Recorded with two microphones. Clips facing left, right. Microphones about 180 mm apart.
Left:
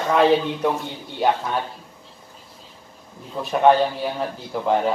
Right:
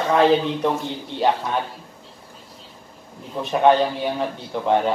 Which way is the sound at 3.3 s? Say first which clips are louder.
Even; centre (ahead or behind).